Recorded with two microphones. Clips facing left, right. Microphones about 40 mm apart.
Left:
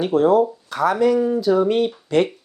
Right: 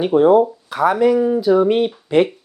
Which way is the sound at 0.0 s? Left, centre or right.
Centre.